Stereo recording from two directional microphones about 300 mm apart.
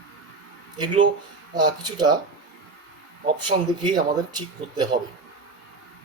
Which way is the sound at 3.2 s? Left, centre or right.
Centre.